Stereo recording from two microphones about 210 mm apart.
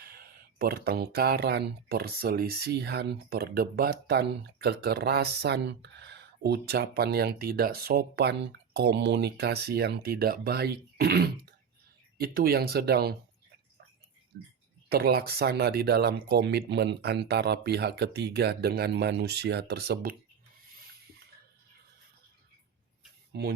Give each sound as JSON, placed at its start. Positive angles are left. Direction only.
{"t": 0.0, "sound": "speech", "side_deg": -45}
{"t": 14.8, "sound": "speech", "side_deg": -45}